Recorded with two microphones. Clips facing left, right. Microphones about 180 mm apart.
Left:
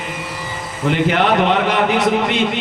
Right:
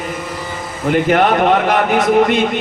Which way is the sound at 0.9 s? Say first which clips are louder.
Right 3 dB; 45° right (ahead or behind).